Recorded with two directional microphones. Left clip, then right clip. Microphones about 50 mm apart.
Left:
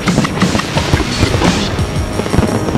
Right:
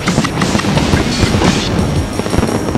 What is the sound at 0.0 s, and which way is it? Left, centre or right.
Music, right.